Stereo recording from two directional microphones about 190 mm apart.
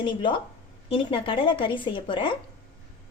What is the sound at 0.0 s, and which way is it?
A woman's voice, 25° left (ahead or behind).